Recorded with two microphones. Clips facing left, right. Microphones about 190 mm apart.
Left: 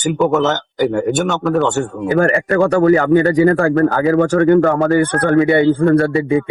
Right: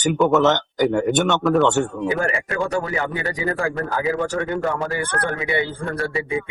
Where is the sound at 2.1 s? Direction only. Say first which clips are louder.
Left 9 dB; 55° left (ahead or behind).